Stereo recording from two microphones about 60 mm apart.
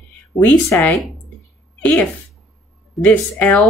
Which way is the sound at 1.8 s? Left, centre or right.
Left.